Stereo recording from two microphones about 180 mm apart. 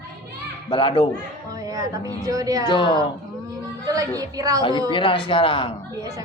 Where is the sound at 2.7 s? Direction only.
25° left (ahead or behind).